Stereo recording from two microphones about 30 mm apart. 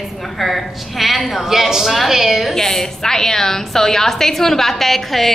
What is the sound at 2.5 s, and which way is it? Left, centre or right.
A woman's voice, centre.